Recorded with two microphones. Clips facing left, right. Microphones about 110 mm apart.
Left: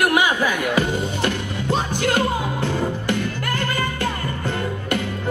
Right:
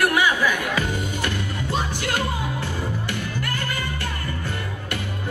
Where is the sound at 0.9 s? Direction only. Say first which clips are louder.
Left 4 dB; 20° left (ahead or behind).